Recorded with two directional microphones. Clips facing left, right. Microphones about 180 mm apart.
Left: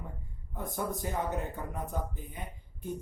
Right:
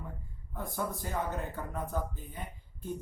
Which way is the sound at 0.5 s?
20° left (ahead or behind).